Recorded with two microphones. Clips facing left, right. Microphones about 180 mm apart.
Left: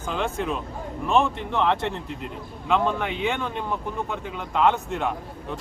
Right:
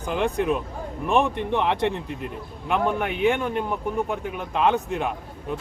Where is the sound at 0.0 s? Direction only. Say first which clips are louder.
Right 3 dB; 15° right (ahead or behind).